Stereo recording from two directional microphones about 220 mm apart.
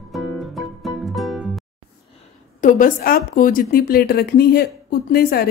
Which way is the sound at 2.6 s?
40° left (ahead or behind).